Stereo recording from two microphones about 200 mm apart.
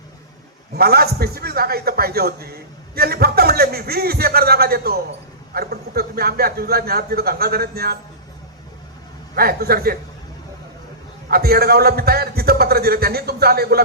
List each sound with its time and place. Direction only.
0.7 s a man's voice: 50° right (ahead or behind)
9.3 s a man's voice: 50° right (ahead or behind)
11.3 s a man's voice: 50° right (ahead or behind)